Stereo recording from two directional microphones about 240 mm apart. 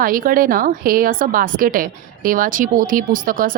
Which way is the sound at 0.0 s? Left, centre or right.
Right.